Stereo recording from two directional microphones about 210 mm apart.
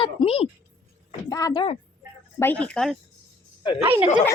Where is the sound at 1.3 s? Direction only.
15° left (ahead or behind).